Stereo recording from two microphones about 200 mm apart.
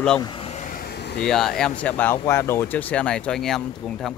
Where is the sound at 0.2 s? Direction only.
25° left (ahead or behind); by 1.2 s 55° left (ahead or behind).